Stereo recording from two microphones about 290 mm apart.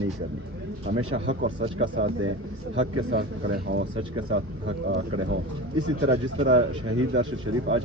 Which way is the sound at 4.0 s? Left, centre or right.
Right.